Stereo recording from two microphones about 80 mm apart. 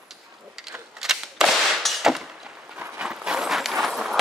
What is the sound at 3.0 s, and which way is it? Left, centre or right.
Clip-clop, centre.